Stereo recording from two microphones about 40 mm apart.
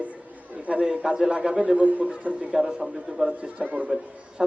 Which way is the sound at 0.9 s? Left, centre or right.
Centre.